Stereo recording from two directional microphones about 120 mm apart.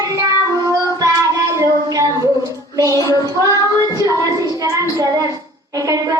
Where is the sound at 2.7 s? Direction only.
30° right (ahead or behind).